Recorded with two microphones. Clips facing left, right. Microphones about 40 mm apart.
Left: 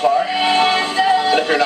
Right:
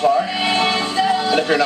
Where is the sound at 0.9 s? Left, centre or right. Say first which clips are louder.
Left 2 dB; centre.